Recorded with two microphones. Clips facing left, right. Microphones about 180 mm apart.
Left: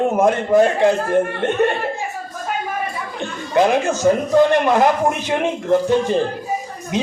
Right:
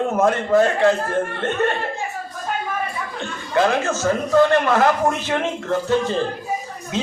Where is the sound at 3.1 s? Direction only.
15° left (ahead or behind).